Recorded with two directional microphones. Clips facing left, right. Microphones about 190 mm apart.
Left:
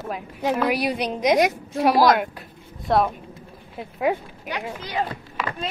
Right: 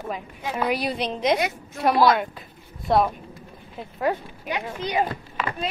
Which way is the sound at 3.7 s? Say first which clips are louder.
Left 2 dB; 10° left (ahead or behind).